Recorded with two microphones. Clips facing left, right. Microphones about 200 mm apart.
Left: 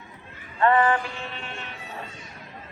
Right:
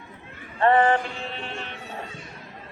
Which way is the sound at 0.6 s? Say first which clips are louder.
Right 1 dB; 25° right (ahead or behind).